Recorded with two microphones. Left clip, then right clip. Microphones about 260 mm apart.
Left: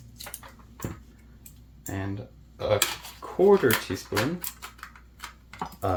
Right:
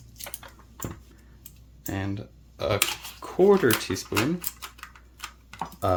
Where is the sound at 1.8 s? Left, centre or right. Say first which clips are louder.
Right 2 dB; right.